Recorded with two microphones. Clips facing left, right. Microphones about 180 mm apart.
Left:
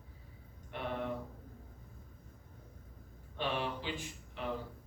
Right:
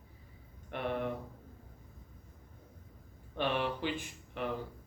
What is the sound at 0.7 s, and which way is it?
Speech, 55° right (ahead or behind).